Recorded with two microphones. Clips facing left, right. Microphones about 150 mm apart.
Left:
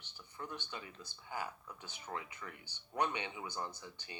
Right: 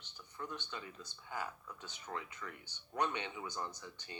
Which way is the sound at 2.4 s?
25° left (ahead or behind).